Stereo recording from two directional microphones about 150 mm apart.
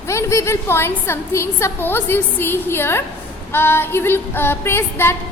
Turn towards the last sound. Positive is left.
turn(degrees=15)  # may be behind; listen again after turning